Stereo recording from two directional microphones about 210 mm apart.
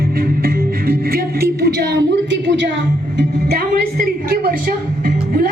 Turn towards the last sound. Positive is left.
turn(degrees=-45)  # may be behind; listen again after turning